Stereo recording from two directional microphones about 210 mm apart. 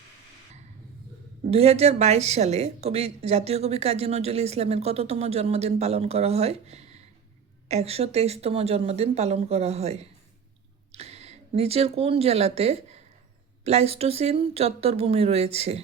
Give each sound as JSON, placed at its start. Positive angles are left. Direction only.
{"t": 1.5, "sound": "a woman's voice", "side_deg": -30}